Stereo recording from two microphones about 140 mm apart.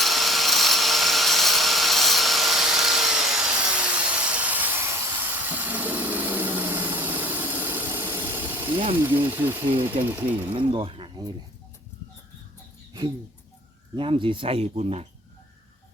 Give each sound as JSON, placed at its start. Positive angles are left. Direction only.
{"t": 0.0, "sound": "a sound", "side_deg": 0}
{"t": 9.0, "sound": "speech", "side_deg": -15}
{"t": 10.5, "sound": "speech", "side_deg": -35}
{"t": 13.9, "sound": "speech", "side_deg": -35}